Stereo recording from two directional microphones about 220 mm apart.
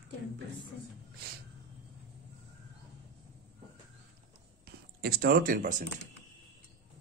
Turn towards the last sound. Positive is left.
turn(degrees=-35)  # may be behind; listen again after turning